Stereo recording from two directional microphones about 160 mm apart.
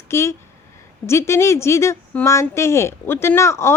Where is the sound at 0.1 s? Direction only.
15° left (ahead or behind).